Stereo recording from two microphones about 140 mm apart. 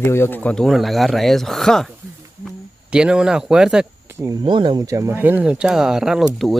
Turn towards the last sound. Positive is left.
turn(degrees=0)  # may be behind; listen again after turning